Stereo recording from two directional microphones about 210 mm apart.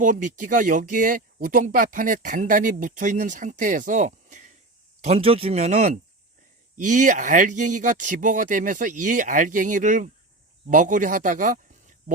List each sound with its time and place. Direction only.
0.0 s speech: 40° right (ahead or behind)